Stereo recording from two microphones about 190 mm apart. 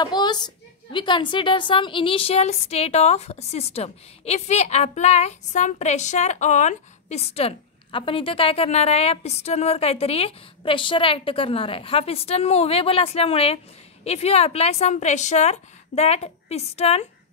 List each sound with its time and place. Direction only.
0.0 s a woman's voice: 20° left (ahead or behind)